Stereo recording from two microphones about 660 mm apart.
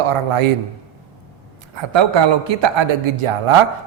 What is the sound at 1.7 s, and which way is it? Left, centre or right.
A man's voice, right.